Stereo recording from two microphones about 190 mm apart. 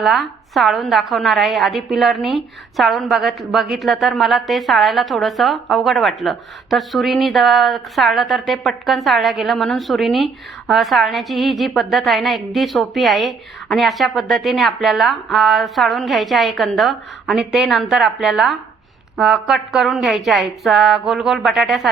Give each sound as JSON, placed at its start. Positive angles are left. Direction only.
{"t": 0.0, "sound": "a woman's voice", "side_deg": 0}